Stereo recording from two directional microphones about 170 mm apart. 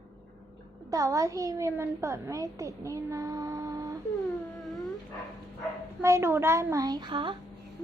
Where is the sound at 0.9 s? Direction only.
20° right (ahead or behind).